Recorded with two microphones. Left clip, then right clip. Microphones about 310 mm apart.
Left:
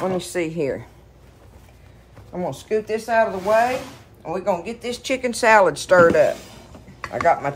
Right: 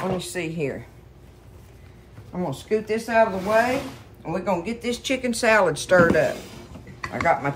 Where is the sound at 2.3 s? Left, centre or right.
Centre.